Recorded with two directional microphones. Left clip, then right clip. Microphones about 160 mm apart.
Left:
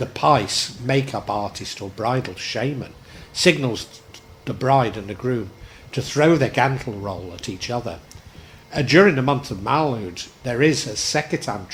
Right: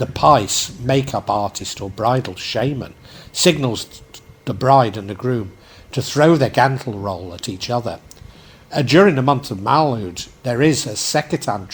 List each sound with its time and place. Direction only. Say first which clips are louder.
0.0 s speech: right 4 dB; 35° right (ahead or behind)